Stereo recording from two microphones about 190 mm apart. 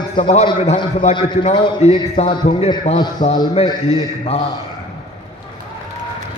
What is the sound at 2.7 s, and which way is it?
A man's voice, 25° left (ahead or behind).